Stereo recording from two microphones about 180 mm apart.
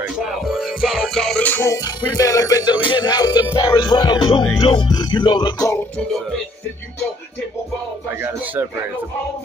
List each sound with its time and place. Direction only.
0.2 s music: centre (ahead or behind); by 5.8 s 20° left (ahead or behind)